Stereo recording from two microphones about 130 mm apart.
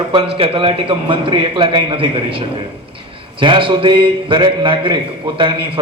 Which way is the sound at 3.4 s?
40° right (ahead or behind).